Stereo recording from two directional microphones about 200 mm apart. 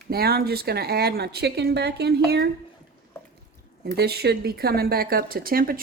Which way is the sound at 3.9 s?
55° right (ahead or behind).